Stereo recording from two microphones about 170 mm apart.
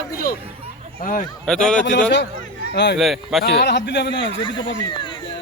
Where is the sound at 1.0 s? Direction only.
50° left (ahead or behind).